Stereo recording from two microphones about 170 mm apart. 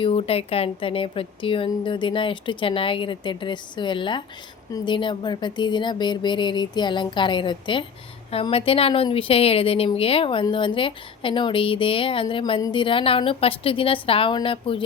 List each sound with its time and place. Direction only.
0.0 s a woman's voice: 35° left (ahead or behind)